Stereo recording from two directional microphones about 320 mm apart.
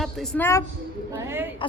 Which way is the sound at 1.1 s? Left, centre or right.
Centre.